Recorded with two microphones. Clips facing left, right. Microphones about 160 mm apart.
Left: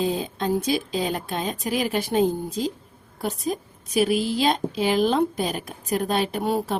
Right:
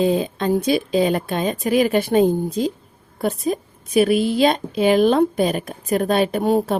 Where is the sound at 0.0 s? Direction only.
65° right (ahead or behind).